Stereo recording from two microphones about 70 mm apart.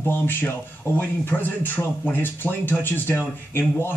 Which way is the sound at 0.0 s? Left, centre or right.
Left.